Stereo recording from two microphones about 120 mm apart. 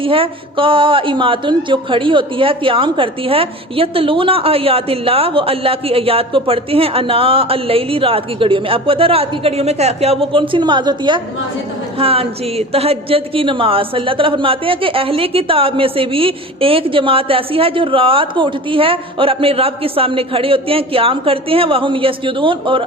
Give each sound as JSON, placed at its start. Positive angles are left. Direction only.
{"t": 0.0, "sound": "a man's voice", "side_deg": -50}
{"t": 11.9, "sound": "a man's voice", "side_deg": -50}